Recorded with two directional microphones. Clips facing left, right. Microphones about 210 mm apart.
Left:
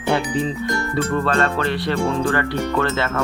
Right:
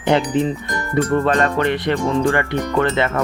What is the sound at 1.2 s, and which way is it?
Speech, 15° right (ahead or behind).